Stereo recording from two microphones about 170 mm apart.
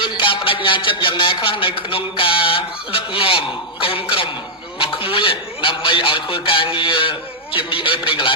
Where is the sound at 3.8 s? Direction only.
30° left (ahead or behind).